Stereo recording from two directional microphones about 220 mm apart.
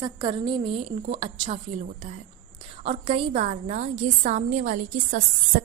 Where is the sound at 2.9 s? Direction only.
25° right (ahead or behind).